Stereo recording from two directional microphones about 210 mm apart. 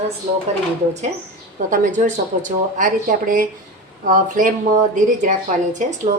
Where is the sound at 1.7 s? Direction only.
35° right (ahead or behind).